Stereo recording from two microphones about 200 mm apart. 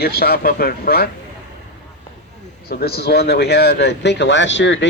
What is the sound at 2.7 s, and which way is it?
Speech, 50° left (ahead or behind).